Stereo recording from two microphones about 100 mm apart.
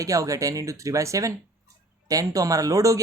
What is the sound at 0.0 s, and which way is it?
Speech, 35° right (ahead or behind).